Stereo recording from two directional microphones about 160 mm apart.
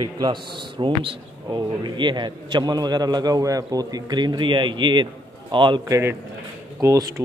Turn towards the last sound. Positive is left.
turn(degrees=-20)  # may be behind; listen again after turning